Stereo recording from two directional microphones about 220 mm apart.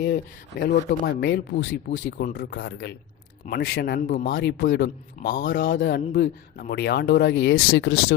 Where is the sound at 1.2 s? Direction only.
55° left (ahead or behind).